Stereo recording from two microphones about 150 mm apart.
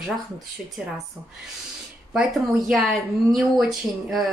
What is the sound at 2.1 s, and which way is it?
A woman's voice, centre (ahead or behind).